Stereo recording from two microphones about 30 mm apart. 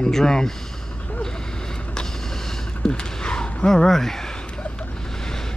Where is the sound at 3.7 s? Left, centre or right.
Centre.